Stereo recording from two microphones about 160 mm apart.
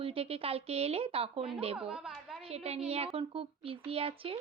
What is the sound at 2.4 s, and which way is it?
A woman's voice, 40° right (ahead or behind).